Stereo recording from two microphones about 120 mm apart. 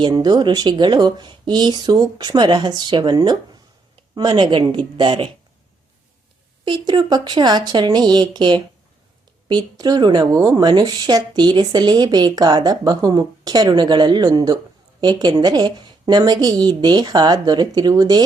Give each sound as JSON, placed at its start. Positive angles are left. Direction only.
{"t": 0.0, "sound": "a woman's voice", "side_deg": -35}
{"t": 6.7, "sound": "speech", "side_deg": -40}